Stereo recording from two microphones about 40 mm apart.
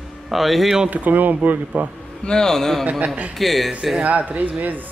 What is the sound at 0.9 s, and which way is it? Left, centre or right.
Speech, right.